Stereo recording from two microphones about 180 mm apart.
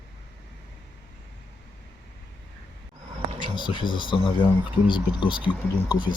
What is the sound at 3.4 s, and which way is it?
Speech, 25° left (ahead or behind).